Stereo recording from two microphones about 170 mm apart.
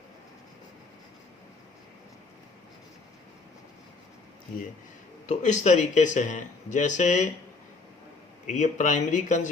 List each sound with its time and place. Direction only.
5.3 s speech: 45° left (ahead or behind)
8.4 s speech: 45° left (ahead or behind)